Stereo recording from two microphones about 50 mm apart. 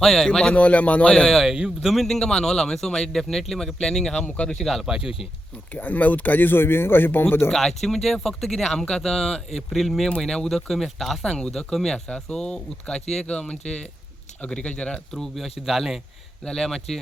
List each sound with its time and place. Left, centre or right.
0.0 s speech: centre
0.3 s a man's voice: centre
1.3 s speech: centre
4.7 s speech: centre
5.7 s speech: left
7.5 s speech: centre
11.2 s a man's voice: centre
15.1 s speech: centre
15.4 s speech: centre
16.5 s speech: centre